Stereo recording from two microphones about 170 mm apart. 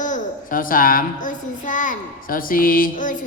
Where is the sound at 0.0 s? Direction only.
50° left (ahead or behind).